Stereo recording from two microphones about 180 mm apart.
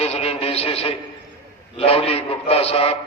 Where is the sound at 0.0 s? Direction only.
35° left (ahead or behind).